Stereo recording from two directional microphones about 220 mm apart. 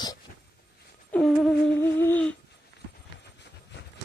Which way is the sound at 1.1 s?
5° left (ahead or behind).